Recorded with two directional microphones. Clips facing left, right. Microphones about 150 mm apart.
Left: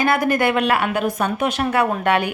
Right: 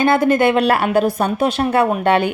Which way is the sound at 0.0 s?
25° right (ahead or behind).